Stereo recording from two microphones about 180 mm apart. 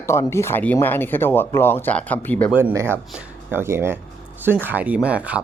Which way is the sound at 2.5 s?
10° right (ahead or behind).